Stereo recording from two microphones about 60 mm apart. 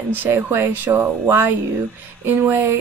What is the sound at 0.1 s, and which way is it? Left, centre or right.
Speech, right.